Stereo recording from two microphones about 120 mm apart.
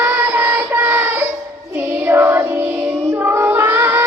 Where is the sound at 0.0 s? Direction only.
10° right (ahead or behind).